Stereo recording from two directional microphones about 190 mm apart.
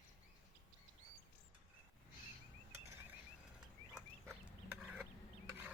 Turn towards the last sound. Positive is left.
turn(degrees=0)  # may be behind; listen again after turning